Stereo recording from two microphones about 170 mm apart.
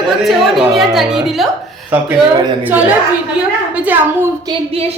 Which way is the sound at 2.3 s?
25° right (ahead or behind).